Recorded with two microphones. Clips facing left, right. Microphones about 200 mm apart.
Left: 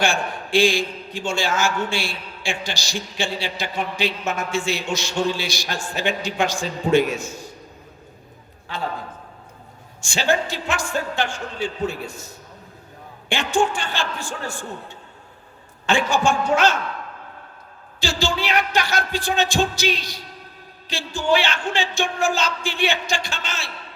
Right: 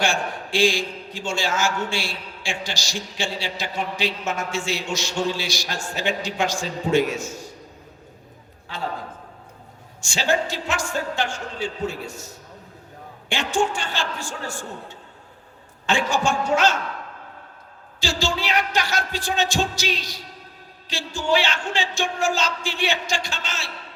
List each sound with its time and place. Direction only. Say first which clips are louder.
0.0 s a man's voice: left 1 dB; 55° left (ahead or behind)
8.6 s a man's voice: left 2 dB; 60° left (ahead or behind)
10.0 s a man's voice: left 1 dB; 60° left (ahead or behind)
18.0 s a man's voice: left 2 dB; 55° left (ahead or behind)